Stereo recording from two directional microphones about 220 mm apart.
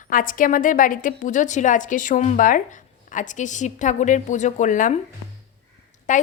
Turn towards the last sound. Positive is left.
turn(degrees=35)  # may be behind; listen again after turning